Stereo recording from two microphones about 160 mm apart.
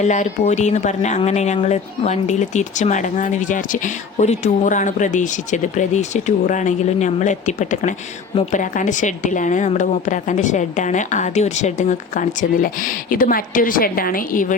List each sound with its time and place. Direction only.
0.0 s speech: 45° left (ahead or behind)